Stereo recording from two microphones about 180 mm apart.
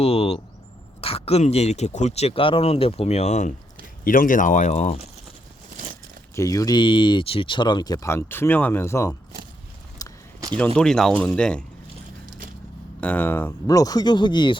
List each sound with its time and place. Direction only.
0.0 s vehicle: 35° left (ahead or behind)
1.0 s speech: 35° left (ahead or behind)
4.0 s speech: 50° left (ahead or behind)
6.3 s speech: 20° left (ahead or behind)
10.0 s a sound: 20° left (ahead or behind)
10.8 s speech: 5° left (ahead or behind)
13.0 s speech: 10° left (ahead or behind); by 14.6 s 25° left (ahead or behind)